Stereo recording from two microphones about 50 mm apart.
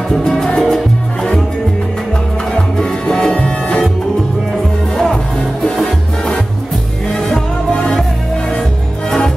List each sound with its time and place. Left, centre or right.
0.1 s music: centre
2.5 s music: centre
4.9 s music: centre